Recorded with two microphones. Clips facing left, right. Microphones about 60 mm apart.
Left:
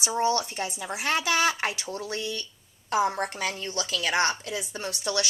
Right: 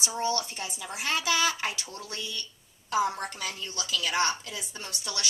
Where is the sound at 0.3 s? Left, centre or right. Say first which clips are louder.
Left 4 dB; left.